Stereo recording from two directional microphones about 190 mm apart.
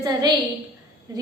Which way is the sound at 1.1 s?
15° right (ahead or behind).